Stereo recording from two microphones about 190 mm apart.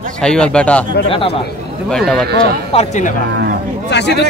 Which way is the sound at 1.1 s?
30° left (ahead or behind).